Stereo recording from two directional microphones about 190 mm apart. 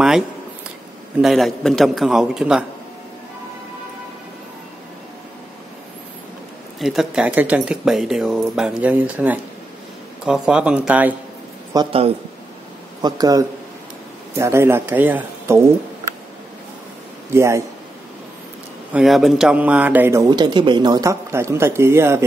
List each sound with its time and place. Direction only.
1.2 s speech: centre (ahead or behind)
6.8 s speech: centre (ahead or behind)
11.7 s a man's voice: 25° right (ahead or behind)
17.3 s speech: 15° right (ahead or behind)
18.9 s speech: centre (ahead or behind)